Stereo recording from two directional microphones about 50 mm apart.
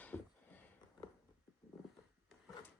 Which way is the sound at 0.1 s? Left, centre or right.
Centre.